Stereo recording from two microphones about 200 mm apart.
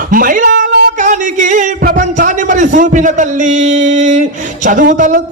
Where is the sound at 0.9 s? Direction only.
40° right (ahead or behind).